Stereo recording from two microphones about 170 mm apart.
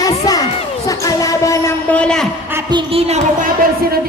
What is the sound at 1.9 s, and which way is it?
Speech, 5° left (ahead or behind).